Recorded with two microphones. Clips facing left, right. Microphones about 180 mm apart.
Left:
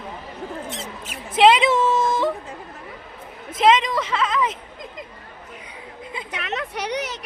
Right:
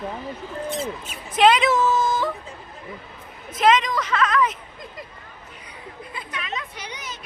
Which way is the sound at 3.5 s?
25° left (ahead or behind).